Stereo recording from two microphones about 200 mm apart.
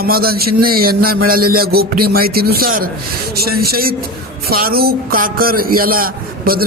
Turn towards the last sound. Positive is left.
turn(degrees=-45)  # may be behind; listen again after turning